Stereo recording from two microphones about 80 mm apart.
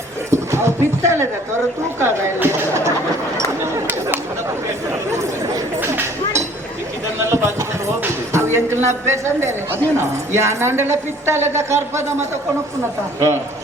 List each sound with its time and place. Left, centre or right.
0.3 s speech: right
2.0 s chatter: right
5.8 s chink: right
7.2 s a sound: right
8.3 s speech: right